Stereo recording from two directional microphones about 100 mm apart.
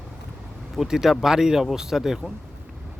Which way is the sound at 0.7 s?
5° right (ahead or behind).